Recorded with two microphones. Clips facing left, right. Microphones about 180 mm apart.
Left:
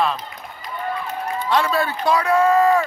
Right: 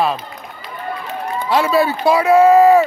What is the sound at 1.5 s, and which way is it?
Speech, 5° right (ahead or behind).